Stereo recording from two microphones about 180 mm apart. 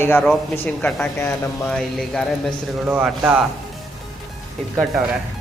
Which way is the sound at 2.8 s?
10° right (ahead or behind).